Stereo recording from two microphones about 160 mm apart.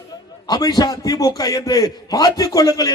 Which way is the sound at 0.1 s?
25° left (ahead or behind).